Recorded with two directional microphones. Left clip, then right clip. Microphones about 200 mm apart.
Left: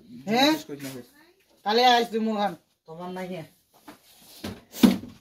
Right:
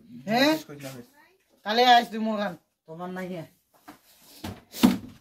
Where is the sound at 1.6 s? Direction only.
35° right (ahead or behind).